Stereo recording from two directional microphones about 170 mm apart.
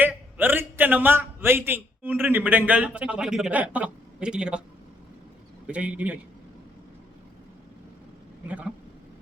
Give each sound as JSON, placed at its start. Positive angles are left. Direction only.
{"t": 0.0, "sound": "a man's voice", "side_deg": -10}
{"t": 5.6, "sound": "a man's voice", "side_deg": -10}
{"t": 8.4, "sound": "a man's voice", "side_deg": -5}